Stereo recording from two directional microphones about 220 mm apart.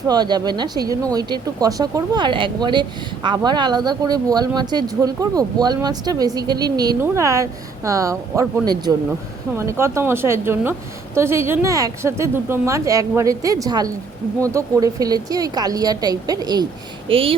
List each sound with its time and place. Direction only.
0.1 s a woman's voice: 20° right (ahead or behind)